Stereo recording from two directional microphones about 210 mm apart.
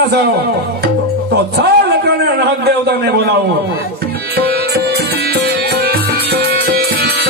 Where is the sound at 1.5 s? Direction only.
50° right (ahead or behind).